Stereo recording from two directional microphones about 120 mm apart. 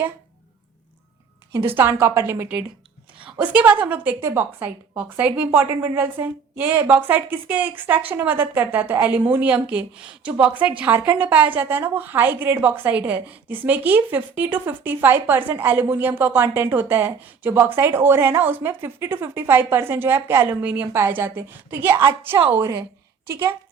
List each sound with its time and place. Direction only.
1.7 s a woman's voice: 20° right (ahead or behind)